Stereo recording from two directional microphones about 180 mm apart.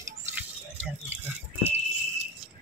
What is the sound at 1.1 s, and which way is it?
Pig, 10° right (ahead or behind).